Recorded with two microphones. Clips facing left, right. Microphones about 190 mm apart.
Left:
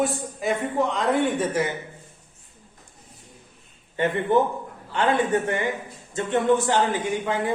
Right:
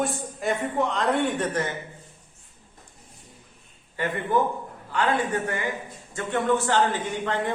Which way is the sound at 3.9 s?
25° left (ahead or behind).